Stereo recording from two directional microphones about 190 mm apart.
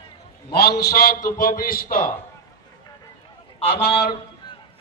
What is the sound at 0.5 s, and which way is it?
A man's voice, 55° left (ahead or behind).